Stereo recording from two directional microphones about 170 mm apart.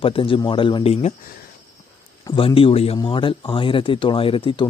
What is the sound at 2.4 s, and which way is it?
Speech, 30° left (ahead or behind).